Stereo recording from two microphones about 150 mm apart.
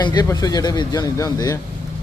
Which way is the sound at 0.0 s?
25° left (ahead or behind).